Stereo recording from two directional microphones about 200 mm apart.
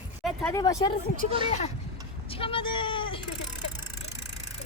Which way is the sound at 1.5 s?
35° left (ahead or behind).